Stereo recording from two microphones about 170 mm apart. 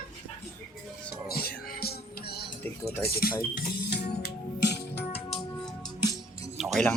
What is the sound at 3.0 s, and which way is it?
Speech, 65° left (ahead or behind).